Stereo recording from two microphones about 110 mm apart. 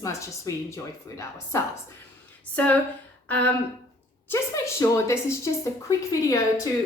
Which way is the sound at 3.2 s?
15° left (ahead or behind).